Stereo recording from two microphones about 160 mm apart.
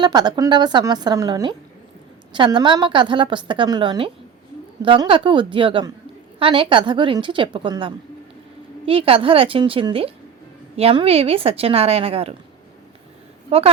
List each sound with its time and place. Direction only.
0.0 s a woman's voice: 25° right (ahead or behind)